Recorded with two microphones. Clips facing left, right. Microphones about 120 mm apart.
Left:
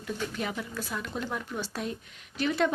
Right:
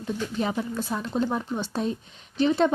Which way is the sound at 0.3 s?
30° right (ahead or behind).